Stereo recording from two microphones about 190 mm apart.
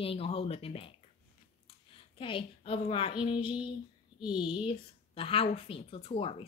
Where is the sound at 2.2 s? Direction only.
30° left (ahead or behind).